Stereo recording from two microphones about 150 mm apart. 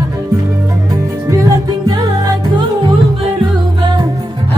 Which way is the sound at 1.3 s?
25° right (ahead or behind).